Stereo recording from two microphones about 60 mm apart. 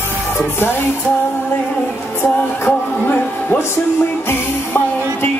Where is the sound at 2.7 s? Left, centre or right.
Left.